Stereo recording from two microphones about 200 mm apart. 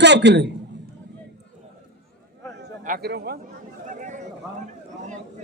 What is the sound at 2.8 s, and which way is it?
Speech, 50° right (ahead or behind).